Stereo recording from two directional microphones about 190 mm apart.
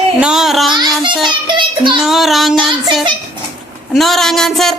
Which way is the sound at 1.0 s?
25° right (ahead or behind).